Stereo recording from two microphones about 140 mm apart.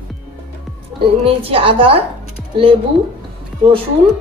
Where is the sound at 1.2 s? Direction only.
40° right (ahead or behind).